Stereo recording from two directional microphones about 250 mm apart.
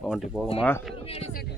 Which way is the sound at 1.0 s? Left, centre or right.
Left.